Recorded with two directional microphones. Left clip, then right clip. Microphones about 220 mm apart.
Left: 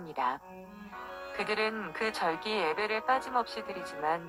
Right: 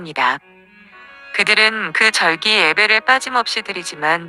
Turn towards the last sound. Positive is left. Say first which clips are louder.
# right 14 dB
turn(degrees=-50)  # may be behind; listen again after turning